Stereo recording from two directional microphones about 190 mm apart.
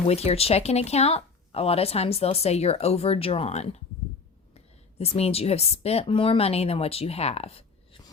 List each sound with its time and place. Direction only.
0.1 s speech: 30° left (ahead or behind)